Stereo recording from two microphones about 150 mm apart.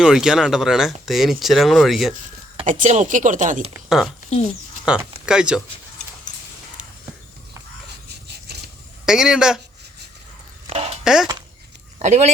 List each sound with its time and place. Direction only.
0.0 s speech: 5° right (ahead or behind)
2.6 s speech: 60° right (ahead or behind)
3.8 s speech: 5° right (ahead or behind)
9.0 s speech: 5° right (ahead or behind)
10.7 s a sound: 40° right (ahead or behind)
11.0 s speech: 5° right (ahead or behind)
11.9 s speech: 50° right (ahead or behind)